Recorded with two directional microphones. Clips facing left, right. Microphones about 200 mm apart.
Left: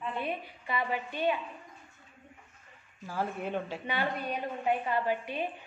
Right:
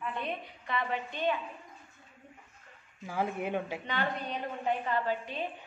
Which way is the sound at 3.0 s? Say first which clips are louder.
Right 1 dB; 15° right (ahead or behind).